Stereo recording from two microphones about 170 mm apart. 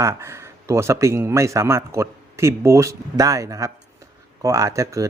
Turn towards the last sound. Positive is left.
turn(degrees=-20)  # may be behind; listen again after turning